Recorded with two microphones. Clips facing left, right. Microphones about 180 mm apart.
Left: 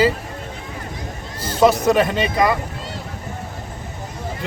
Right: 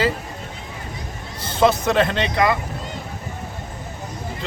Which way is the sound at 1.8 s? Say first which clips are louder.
Left 2 dB; 10° left (ahead or behind).